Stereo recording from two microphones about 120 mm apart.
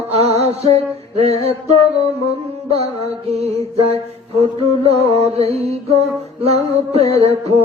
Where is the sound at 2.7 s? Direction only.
60° right (ahead or behind).